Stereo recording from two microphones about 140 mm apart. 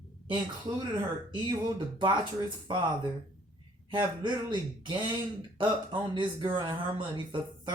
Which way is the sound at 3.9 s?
35° right (ahead or behind).